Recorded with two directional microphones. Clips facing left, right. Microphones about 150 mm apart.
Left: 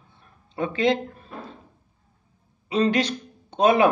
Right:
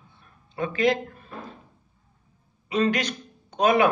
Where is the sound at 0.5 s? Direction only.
25° left (ahead or behind).